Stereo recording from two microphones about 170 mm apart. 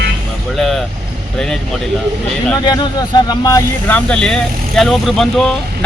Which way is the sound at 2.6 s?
25° left (ahead or behind).